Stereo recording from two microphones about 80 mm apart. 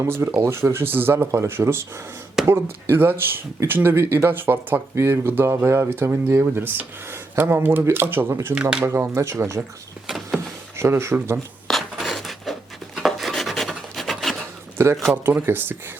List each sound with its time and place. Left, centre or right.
0.0 s speech: right
10.1 s power windows: centre
10.8 s speech: right
11.7 s a sound: centre
14.8 s speech: right